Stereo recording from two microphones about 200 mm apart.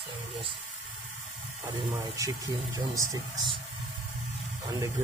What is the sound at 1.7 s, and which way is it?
Speech, 15° right (ahead or behind).